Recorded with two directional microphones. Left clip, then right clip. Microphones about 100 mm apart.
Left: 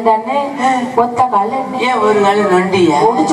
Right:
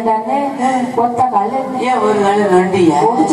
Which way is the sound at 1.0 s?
50° left (ahead or behind).